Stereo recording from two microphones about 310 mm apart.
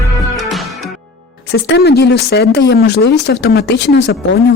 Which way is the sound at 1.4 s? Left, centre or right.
Left.